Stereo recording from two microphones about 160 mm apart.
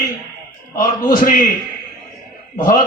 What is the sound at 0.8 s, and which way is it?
Speech, 60° left (ahead or behind).